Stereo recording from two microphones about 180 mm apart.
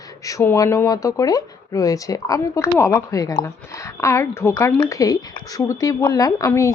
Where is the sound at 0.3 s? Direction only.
20° left (ahead or behind).